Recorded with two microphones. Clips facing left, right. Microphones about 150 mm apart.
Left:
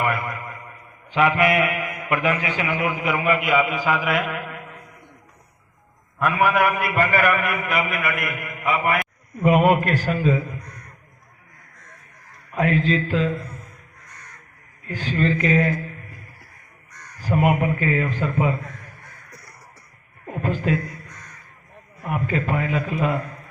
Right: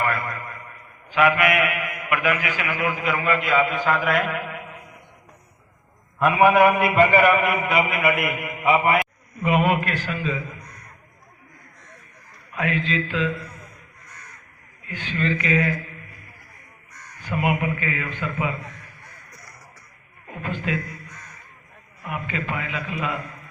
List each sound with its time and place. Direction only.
0.0 s a sound: 20° left (ahead or behind)
1.1 s a man's voice: 30° left (ahead or behind); by 4.6 s centre (ahead or behind)
6.1 s a man's voice: 20° right (ahead or behind)
9.4 s a man's voice: 45° left (ahead or behind)
12.5 s a man's voice: 40° left (ahead or behind)
14.8 s a man's voice: 40° left (ahead or behind)
17.2 s a man's voice: 40° left (ahead or behind)
20.2 s a sound: 40° left (ahead or behind)
22.0 s a man's voice: 45° left (ahead or behind)